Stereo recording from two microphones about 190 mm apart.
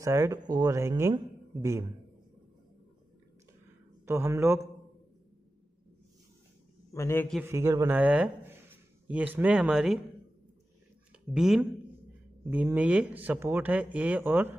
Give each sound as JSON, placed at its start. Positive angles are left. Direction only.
{"t": 0.0, "sound": "speech", "side_deg": -15}
{"t": 4.0, "sound": "speech", "side_deg": -15}
{"t": 6.9, "sound": "a man's voice", "side_deg": 15}
{"t": 7.4, "sound": "speech", "side_deg": -15}
{"t": 11.3, "sound": "speech", "side_deg": 0}